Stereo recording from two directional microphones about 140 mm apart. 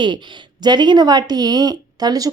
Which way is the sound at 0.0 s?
35° right (ahead or behind).